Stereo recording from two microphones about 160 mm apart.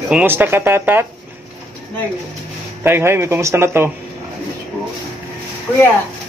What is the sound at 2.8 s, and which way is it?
Speech, 15° right (ahead or behind).